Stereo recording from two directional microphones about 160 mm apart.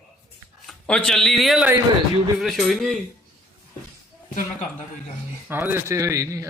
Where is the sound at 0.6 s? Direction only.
5° left (ahead or behind).